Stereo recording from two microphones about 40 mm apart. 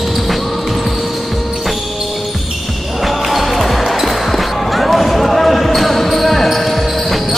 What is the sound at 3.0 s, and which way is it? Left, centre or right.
Basketball bounce, centre.